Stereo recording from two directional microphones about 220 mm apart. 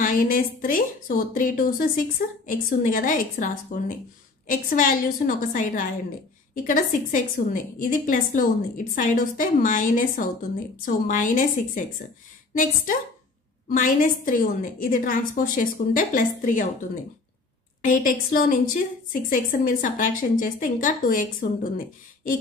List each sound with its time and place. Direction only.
0.0 s a woman's voice: 40° left (ahead or behind)
17.8 s a woman's voice: 40° left (ahead or behind)